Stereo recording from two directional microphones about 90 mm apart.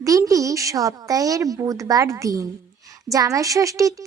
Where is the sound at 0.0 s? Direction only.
40° right (ahead or behind).